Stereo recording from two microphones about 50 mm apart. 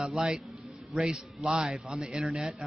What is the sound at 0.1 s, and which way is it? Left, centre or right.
A man's voice, centre.